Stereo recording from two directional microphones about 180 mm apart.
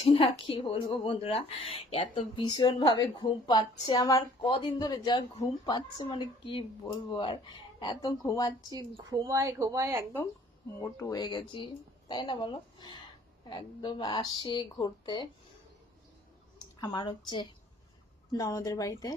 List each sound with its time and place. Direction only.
0.0 s a woman's voice: 30° left (ahead or behind)
8.7 s a woman's voice: 20° right (ahead or behind)
10.8 s a woman's voice: 15° left (ahead or behind)
16.6 s a woman's voice: 25° left (ahead or behind)